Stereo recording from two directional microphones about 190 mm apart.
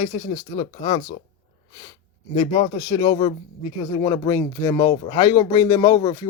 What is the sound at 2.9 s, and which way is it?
Speech, 20° left (ahead or behind).